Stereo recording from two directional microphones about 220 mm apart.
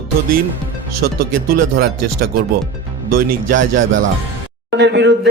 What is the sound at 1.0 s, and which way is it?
Speech, 45° right (ahead or behind).